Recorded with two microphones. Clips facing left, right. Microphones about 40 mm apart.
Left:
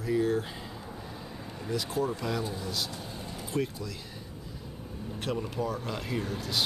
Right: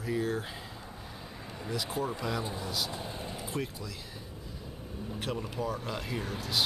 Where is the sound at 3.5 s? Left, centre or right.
Centre.